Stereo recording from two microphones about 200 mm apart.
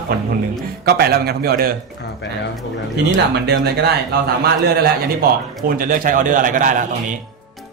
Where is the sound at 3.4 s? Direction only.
55° right (ahead or behind).